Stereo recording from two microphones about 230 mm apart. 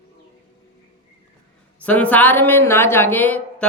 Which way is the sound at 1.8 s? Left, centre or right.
Centre.